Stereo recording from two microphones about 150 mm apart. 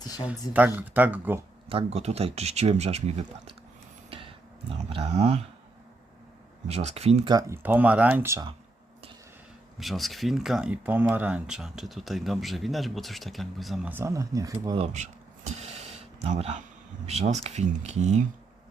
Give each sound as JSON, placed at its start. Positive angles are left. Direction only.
{"t": 0.3, "sound": "speech", "side_deg": -10}
{"t": 1.7, "sound": "speech", "side_deg": -45}
{"t": 4.9, "sound": "speech", "side_deg": -45}
{"t": 6.7, "sound": "speech", "side_deg": -45}
{"t": 7.3, "sound": "speech", "side_deg": -20}
{"t": 9.7, "sound": "speech", "side_deg": 0}
{"t": 13.8, "sound": "speech", "side_deg": -15}
{"t": 15.4, "sound": "a sound", "side_deg": -45}
{"t": 17.1, "sound": "speech", "side_deg": -45}